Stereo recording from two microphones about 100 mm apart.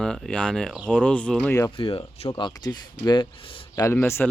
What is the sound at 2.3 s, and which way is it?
Speech, 45° left (ahead or behind).